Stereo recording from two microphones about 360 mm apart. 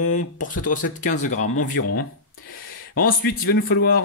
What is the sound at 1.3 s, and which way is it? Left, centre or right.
Speech, left.